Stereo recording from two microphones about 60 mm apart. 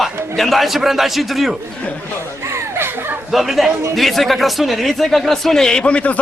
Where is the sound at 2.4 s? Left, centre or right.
Right.